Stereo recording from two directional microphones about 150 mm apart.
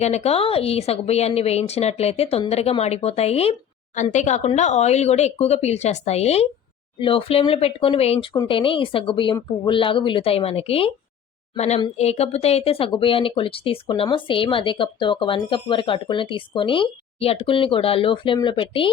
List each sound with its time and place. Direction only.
0.0 s a woman's voice: 45° left (ahead or behind)
3.9 s a woman's voice: 55° left (ahead or behind); by 18.9 s 35° left (ahead or behind)